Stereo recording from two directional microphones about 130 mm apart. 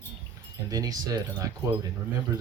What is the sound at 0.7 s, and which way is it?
Speech, 30° right (ahead or behind).